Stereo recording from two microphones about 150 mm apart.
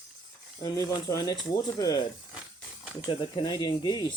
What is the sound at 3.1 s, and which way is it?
Speech, 30° left (ahead or behind).